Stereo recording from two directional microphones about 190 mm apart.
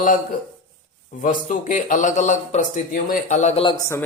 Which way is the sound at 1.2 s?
45° left (ahead or behind).